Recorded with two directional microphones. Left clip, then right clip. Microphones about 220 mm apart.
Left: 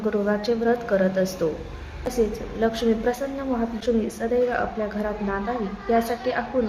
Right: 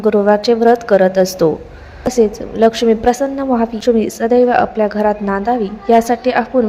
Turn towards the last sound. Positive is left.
turn(degrees=-35)  # may be behind; listen again after turning